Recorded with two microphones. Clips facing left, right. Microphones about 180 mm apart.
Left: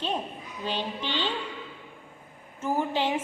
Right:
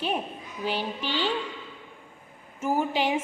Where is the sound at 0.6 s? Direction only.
10° right (ahead or behind).